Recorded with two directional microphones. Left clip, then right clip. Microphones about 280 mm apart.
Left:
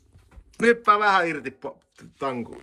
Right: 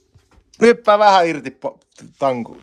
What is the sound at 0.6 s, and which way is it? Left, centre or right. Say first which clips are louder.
Speech: right 7 dB; centre.